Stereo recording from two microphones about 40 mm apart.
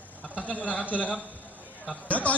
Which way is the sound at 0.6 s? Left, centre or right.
Left.